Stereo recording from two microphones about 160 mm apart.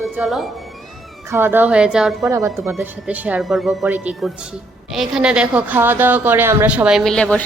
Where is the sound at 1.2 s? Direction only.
15° right (ahead or behind).